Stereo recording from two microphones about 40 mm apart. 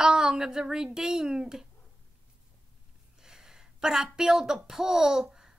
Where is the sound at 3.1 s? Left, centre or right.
Centre.